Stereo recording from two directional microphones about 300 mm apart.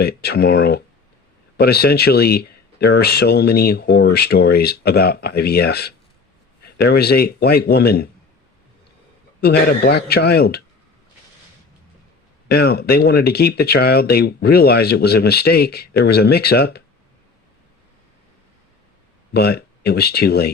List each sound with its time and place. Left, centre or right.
0.0 s speech: left
9.4 s speech: left
12.5 s speech: left
19.3 s speech: left